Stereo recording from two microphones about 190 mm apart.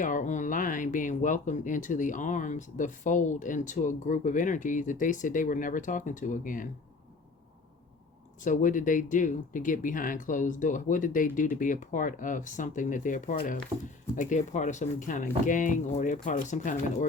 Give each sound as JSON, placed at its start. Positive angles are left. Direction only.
{"t": 0.0, "sound": "speech", "side_deg": 40}
{"t": 8.4, "sound": "speech", "side_deg": 45}